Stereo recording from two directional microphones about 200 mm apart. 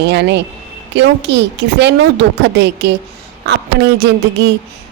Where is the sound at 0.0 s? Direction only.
60° right (ahead or behind).